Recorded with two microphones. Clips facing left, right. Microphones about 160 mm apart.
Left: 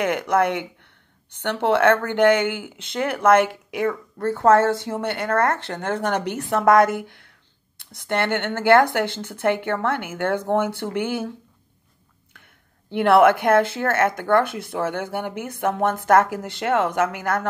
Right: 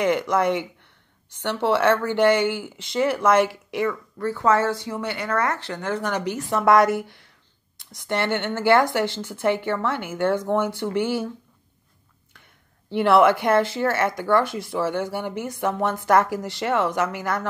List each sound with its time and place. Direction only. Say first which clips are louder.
0.0 s speech: even; 55° left (ahead or behind)
12.9 s speech: left 2 dB; 55° left (ahead or behind)